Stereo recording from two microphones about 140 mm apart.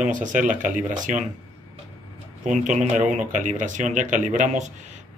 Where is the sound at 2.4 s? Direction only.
60° right (ahead or behind).